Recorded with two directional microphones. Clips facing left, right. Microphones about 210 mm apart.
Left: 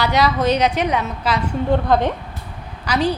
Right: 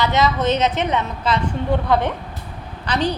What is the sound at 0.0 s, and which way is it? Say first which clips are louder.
Speech: left 1 dB; 20° right (ahead or behind).